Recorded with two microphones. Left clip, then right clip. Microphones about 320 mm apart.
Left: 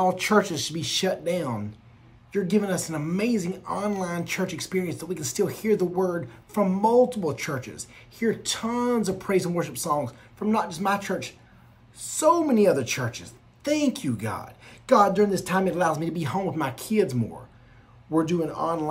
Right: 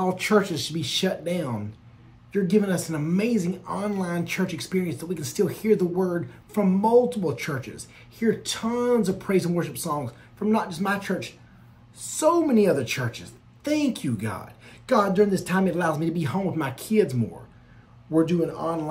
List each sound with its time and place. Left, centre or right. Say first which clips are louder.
0.0 s speech: left 1 dB; centre